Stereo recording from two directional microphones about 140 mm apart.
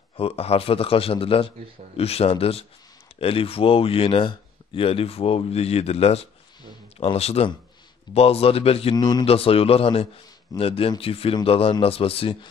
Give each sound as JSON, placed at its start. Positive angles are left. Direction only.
{"t": 0.2, "sound": "a man's voice", "side_deg": 45}
{"t": 8.9, "sound": "speech", "side_deg": 30}
{"t": 9.2, "sound": "a man's voice", "side_deg": 45}